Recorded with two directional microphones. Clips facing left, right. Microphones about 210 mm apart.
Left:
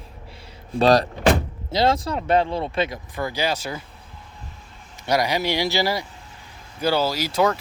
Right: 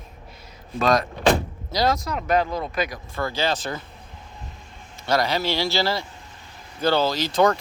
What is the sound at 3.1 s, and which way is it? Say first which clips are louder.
Speech: even; 15° left (ahead or behind).